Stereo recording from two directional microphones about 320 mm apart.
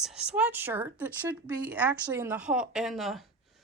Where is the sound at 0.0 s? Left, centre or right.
Centre.